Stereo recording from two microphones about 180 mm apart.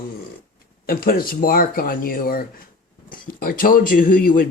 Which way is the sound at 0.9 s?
55° left (ahead or behind).